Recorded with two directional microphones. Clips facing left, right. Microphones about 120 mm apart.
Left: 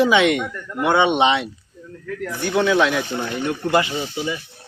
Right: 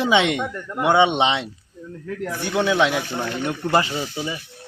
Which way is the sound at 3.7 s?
35° right (ahead or behind).